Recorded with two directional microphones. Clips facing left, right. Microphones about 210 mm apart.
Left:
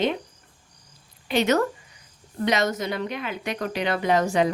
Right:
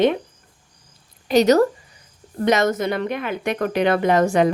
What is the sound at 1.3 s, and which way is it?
Speech, 40° right (ahead or behind).